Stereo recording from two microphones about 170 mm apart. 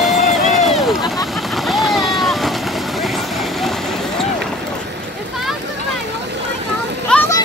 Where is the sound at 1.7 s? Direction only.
Centre (ahead or behind).